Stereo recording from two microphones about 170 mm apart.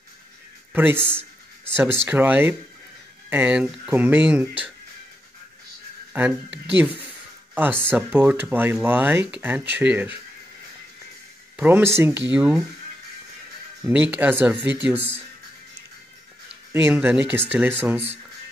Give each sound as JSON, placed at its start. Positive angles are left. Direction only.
{"t": 0.9, "sound": "a sound", "side_deg": 5}
{"t": 1.9, "sound": "speech", "side_deg": -10}
{"t": 6.1, "sound": "speech", "side_deg": -10}
{"t": 7.7, "sound": "speech", "side_deg": 5}
{"t": 8.1, "sound": "speech", "side_deg": -10}
{"t": 11.5, "sound": "speech", "side_deg": -10}
{"t": 14.1, "sound": "speech", "side_deg": -10}
{"t": 16.7, "sound": "speech", "side_deg": -10}